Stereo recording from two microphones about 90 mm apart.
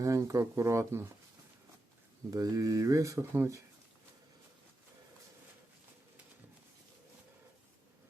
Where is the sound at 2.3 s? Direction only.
40° right (ahead or behind).